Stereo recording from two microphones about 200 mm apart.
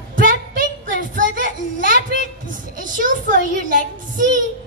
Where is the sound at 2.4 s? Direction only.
40° right (ahead or behind).